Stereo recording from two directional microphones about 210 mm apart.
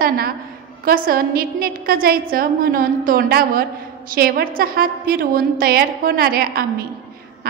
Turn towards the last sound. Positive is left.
turn(degrees=-45)  # may be behind; listen again after turning